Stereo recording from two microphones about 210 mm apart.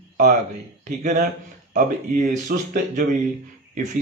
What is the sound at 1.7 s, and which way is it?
Speech, 35° right (ahead or behind).